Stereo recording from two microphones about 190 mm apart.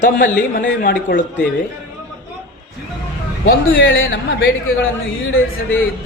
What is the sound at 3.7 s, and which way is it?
Speech, 90° left.